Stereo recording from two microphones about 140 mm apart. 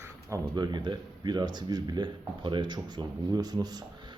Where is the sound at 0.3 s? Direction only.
30° right (ahead or behind).